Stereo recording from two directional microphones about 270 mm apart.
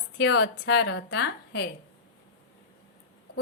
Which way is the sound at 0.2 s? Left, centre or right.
Left.